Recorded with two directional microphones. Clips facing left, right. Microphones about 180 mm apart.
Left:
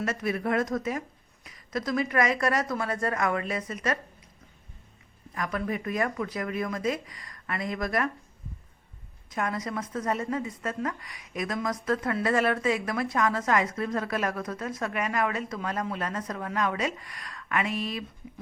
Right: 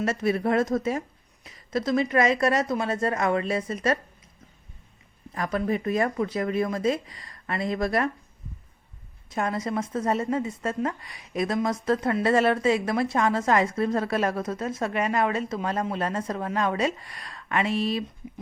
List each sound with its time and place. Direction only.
0.0 s a woman's voice: 30° right (ahead or behind)
5.3 s a woman's voice: 30° right (ahead or behind)
9.3 s a woman's voice: 30° right (ahead or behind)